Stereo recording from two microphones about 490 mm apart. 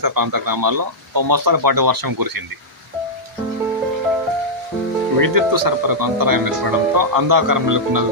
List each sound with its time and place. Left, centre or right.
0.0 s speech: right
5.2 s speech: right